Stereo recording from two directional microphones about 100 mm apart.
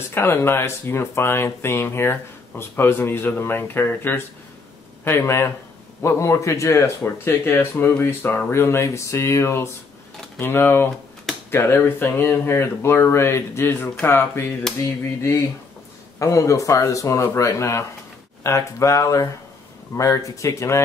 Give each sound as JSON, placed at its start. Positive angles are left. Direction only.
{"t": 0.1, "sound": "speech", "side_deg": 25}
{"t": 16.2, "sound": "speech", "side_deg": 30}